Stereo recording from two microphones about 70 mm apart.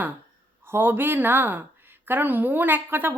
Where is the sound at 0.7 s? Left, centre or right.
Right.